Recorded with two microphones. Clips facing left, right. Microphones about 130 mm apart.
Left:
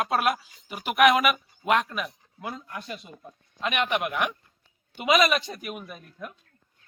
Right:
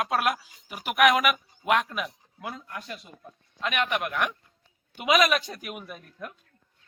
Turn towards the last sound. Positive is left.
turn(degrees=0)  # may be behind; listen again after turning